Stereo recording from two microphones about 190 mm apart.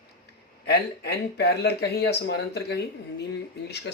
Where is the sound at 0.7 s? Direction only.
60° left (ahead or behind).